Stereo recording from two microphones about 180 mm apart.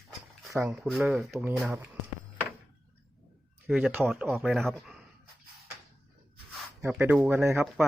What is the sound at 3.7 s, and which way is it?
Speech, 5° right (ahead or behind).